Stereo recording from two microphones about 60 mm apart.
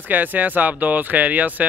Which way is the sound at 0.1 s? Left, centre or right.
Right.